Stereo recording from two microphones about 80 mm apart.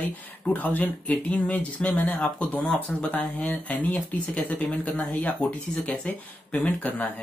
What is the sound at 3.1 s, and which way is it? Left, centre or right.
Speech, centre.